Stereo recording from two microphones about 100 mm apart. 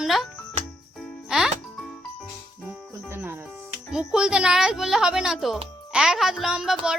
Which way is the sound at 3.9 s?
10° right (ahead or behind).